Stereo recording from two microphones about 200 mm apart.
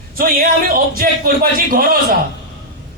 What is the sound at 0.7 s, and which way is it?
A woman's voice, 45° right (ahead or behind).